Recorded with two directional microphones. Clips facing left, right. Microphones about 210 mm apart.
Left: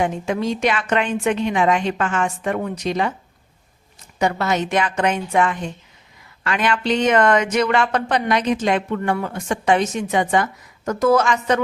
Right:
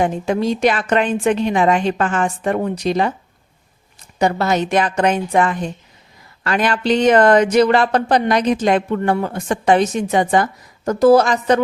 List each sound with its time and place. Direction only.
0.0 s speech: 35° right (ahead or behind)
4.2 s speech: 35° right (ahead or behind)